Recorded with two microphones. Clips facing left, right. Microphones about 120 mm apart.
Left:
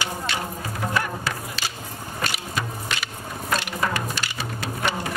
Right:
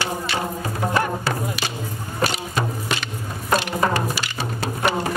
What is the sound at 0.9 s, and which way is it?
Music, 30° right (ahead or behind).